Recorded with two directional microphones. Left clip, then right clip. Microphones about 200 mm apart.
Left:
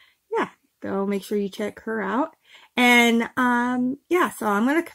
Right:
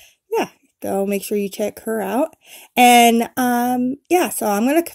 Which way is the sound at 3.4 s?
20° right (ahead or behind).